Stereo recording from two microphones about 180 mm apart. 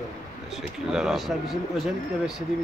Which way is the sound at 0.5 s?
Centre (ahead or behind).